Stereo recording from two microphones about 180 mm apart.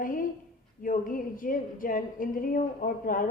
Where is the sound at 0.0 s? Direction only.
50° left (ahead or behind).